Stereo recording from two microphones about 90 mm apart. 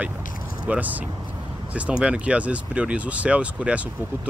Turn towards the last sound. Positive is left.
turn(degrees=-15)  # may be behind; listen again after turning